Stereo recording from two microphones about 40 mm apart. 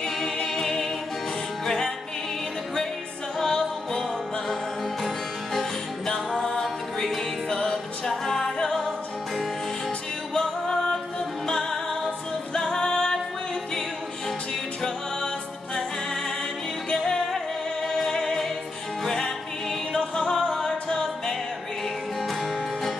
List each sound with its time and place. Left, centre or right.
0.0 s a capella: centre
3.3 s music: centre
5.0 s music: centre
10.3 s music: centre
16.9 s music: centre
17.8 s singing: centre
19.0 s music: centre